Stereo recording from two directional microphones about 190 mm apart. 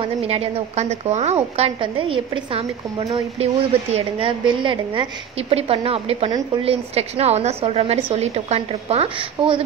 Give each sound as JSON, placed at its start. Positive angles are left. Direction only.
{"t": 0.0, "sound": "a woman's voice", "side_deg": -30}